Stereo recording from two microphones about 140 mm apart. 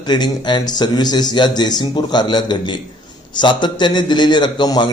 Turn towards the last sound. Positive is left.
turn(degrees=30)  # may be behind; listen again after turning